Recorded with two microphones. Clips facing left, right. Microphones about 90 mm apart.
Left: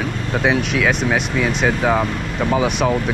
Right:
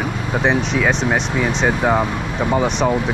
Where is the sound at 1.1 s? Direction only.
15° right (ahead or behind).